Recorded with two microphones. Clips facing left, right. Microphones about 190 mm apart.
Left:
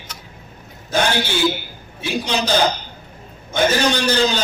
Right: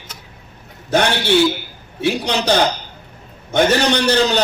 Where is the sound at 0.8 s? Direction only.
65° right (ahead or behind).